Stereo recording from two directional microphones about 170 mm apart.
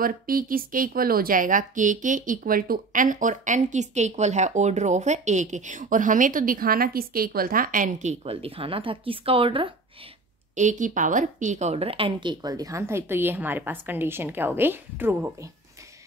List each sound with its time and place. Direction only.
0.0 s a woman's voice: 55° right (ahead or behind); by 9.7 s 30° right (ahead or behind)
10.5 s speech: 45° right (ahead or behind); by 15.3 s 10° right (ahead or behind)